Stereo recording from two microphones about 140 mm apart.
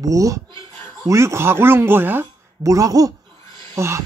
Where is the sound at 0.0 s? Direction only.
25° right (ahead or behind).